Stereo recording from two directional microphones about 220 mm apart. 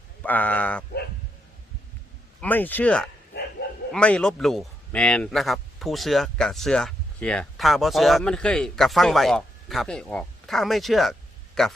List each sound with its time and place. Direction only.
0.2 s speech: 5° left (ahead or behind)
2.4 s speech: 10° left (ahead or behind)
3.6 s bow-wow: 45° left (ahead or behind)
3.9 s speech: 5° left (ahead or behind)